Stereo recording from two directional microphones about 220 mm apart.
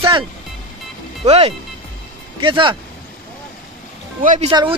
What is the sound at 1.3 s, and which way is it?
Speech, 30° right (ahead or behind).